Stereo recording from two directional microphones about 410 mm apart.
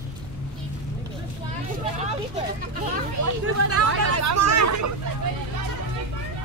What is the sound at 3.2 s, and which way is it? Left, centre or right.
Hubbub, right.